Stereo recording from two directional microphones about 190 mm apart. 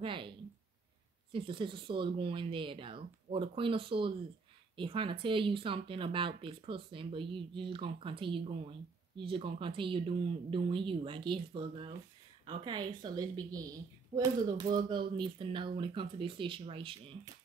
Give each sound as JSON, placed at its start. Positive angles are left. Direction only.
{"t": 0.0, "sound": "speech", "side_deg": -25}
{"t": 1.3, "sound": "speech", "side_deg": -25}